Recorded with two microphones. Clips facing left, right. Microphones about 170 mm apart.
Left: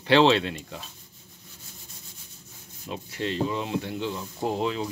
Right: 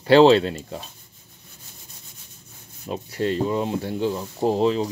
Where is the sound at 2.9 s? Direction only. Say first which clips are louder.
Right 6 dB; 40° right (ahead or behind).